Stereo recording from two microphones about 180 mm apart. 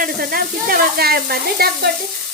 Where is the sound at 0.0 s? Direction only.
55° right (ahead or behind).